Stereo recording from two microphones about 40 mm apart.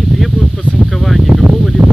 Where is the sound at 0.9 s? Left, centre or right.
Centre.